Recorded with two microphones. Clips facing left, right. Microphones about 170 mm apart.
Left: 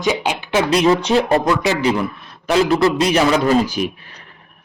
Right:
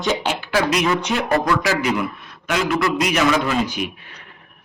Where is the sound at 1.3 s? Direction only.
20° left (ahead or behind).